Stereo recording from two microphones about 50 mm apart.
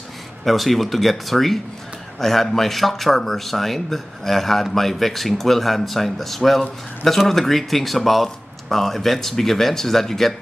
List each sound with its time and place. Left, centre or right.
0.5 s speech: centre